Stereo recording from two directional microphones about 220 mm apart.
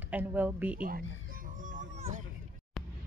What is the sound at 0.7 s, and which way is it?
Speech, 40° right (ahead or behind).